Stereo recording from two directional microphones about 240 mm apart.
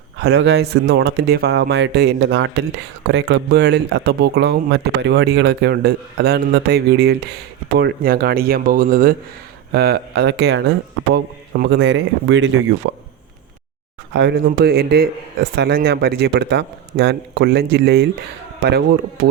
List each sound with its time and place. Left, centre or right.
0.2 s speech: right
14.1 s speech: right